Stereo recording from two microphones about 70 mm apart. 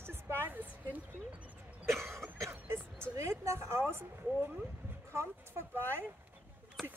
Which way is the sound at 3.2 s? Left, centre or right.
Right.